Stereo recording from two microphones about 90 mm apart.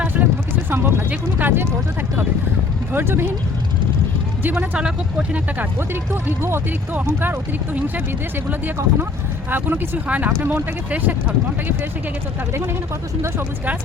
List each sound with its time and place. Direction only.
0.7 s speech: 25° right (ahead or behind)
2.9 s speech: 25° right (ahead or behind)
4.5 s speech: 10° right (ahead or behind)